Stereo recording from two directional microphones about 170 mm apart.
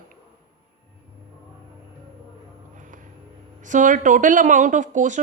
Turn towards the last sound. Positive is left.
turn(degrees=-45)  # may be behind; listen again after turning